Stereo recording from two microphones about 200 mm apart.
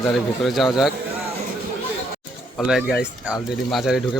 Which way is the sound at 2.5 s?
Centre (ahead or behind).